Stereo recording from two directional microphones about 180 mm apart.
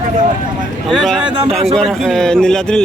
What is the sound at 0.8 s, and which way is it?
Speech, centre (ahead or behind).